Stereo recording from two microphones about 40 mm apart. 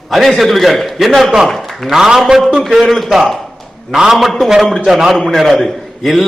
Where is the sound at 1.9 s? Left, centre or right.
Centre.